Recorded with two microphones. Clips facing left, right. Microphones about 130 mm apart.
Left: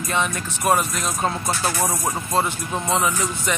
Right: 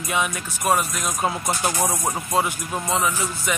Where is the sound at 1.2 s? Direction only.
15° right (ahead or behind).